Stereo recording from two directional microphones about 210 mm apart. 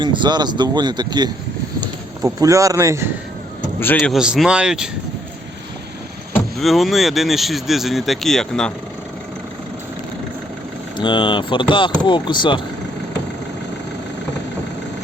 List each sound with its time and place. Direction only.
0.0 s speech: 20° right (ahead or behind)
3.8 s speech: 10° left (ahead or behind)
4.1 s speech: centre (ahead or behind)
6.3 s speech: centre (ahead or behind)
10.9 s speech: 25° left (ahead or behind)